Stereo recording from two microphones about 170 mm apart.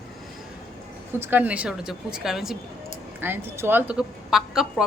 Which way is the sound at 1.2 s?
10° right (ahead or behind).